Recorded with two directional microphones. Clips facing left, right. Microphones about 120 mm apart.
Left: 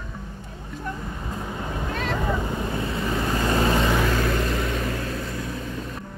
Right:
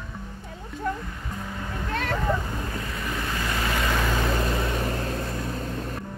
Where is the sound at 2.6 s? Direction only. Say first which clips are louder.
Left 5 dB; 25° left (ahead or behind).